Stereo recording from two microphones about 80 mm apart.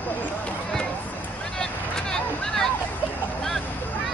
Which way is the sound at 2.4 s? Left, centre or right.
Centre.